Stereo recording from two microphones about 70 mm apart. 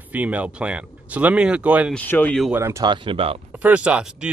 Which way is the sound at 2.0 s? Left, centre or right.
Left.